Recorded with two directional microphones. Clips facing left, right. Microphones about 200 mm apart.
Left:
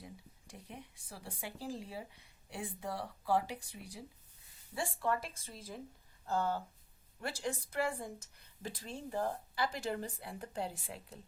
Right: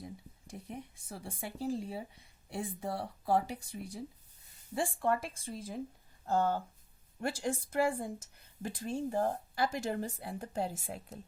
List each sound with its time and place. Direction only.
0.7 s speech: 45° right (ahead or behind)